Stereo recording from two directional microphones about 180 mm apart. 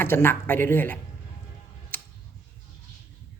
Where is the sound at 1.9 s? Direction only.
10° left (ahead or behind).